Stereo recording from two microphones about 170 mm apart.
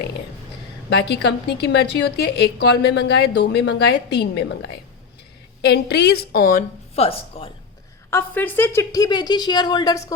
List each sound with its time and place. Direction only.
0.9 s a woman's voice: 80° left
5.6 s a woman's voice: 75° left (ahead or behind); by 6.7 s 55° left (ahead or behind)
6.9 s speech: 35° left (ahead or behind)
8.1 s a woman's voice: 10° left (ahead or behind)